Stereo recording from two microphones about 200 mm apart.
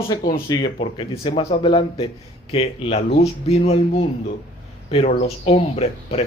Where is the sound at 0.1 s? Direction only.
20° left (ahead or behind).